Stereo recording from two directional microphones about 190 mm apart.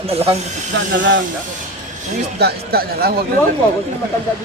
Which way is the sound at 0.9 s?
75° right (ahead or behind).